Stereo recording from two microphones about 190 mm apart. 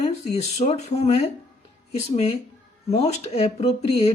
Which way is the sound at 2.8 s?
35° left (ahead or behind).